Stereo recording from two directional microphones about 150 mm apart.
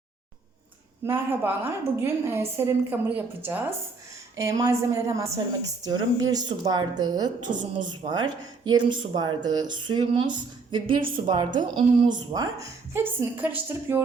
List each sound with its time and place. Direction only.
1.0 s a woman's voice: 15° right (ahead or behind)
7.5 s speech: 60° right (ahead or behind)
8.1 s speech: 30° right (ahead or behind); by 14.0 s 15° right (ahead or behind)